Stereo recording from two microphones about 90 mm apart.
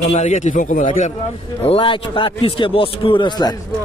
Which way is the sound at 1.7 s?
70° left (ahead or behind).